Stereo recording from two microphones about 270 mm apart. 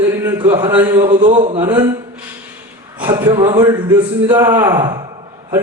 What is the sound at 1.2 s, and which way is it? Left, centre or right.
Speech, right.